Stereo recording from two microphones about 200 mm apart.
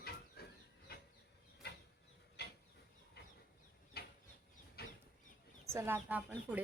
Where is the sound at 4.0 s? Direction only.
50° left (ahead or behind).